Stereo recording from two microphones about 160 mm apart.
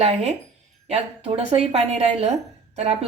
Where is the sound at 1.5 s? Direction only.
45° right (ahead or behind).